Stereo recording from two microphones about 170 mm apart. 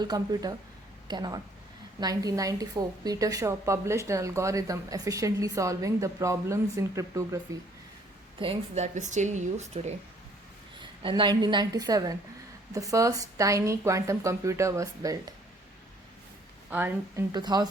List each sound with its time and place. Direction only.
0.0 s a woman's voice: 25° right (ahead or behind)
8.4 s speech: 35° right (ahead or behind)
10.8 s a woman's voice: 30° right (ahead or behind)
16.6 s a woman's voice: 10° right (ahead or behind)
17.3 s a woman's voice: 25° right (ahead or behind)